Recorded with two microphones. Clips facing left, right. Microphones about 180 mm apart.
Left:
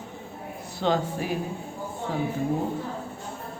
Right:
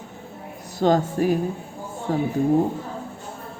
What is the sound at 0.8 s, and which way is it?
Speech, 45° right (ahead or behind).